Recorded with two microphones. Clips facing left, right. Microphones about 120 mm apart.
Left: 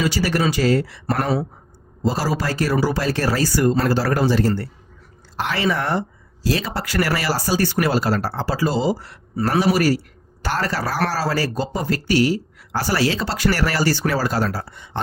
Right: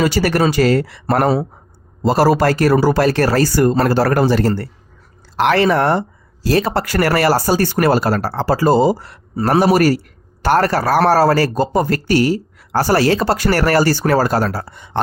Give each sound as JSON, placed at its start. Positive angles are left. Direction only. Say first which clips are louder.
{"t": 0.0, "sound": "speech", "louder": "right 5 dB", "side_deg": -60}
{"t": 1.0, "sound": "speech", "louder": "right 7 dB", "side_deg": -50}
{"t": 2.0, "sound": "speech", "louder": "right 9 dB", "side_deg": -65}